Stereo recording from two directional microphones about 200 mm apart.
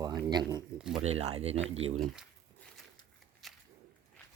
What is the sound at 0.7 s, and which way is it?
Speech, 5° right (ahead or behind).